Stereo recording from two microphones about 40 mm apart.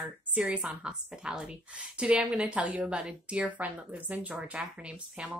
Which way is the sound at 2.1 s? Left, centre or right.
Right.